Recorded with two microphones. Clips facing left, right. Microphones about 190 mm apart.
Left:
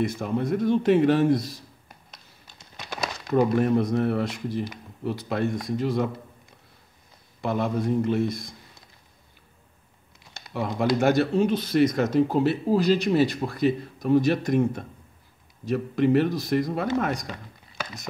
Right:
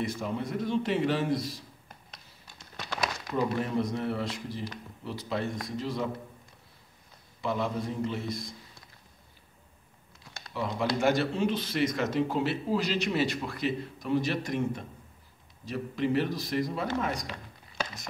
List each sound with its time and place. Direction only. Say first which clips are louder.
0.0 s speech: left 6 dB; 50° left (ahead or behind)
2.4 s a sound: right 1 dB; 20° left (ahead or behind)
3.3 s speech: left 8 dB; 55° left (ahead or behind)
7.4 s speech: left 6 dB; 55° left (ahead or behind)
10.5 s speech: left 6 dB; 55° left (ahead or behind)